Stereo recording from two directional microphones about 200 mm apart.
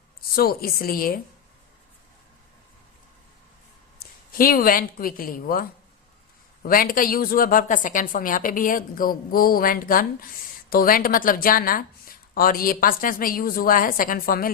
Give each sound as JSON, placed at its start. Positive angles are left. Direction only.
{"t": 0.3, "sound": "speech", "side_deg": 50}
{"t": 4.0, "sound": "speech", "side_deg": 45}